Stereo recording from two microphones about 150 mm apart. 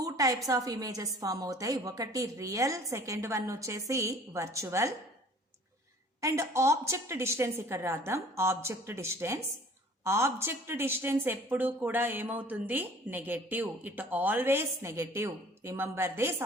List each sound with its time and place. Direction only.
0.0 s a sound: 25° right (ahead or behind)
0.4 s a woman's voice: 25° right (ahead or behind)
6.2 s speech: 20° right (ahead or behind)